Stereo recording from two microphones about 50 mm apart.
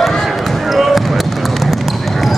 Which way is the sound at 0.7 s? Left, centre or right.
Centre.